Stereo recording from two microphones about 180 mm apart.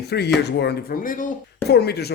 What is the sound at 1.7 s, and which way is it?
Speech, 65° left (ahead or behind).